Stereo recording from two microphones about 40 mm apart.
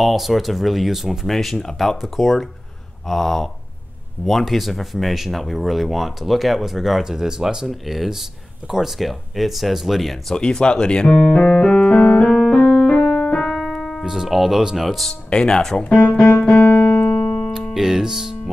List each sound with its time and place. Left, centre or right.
0.0 s speech: centre
10.3 s speech: centre
11.6 s keyboard: left
12.0 s keyboard: left
12.4 s keyboard: left
13.6 s piano: centre
14.0 s music: centre
14.8 s speech: centre
15.2 s speech: left
15.8 s speech: left
16.3 s piano: left
16.8 s piano: left
17.7 s speech: centre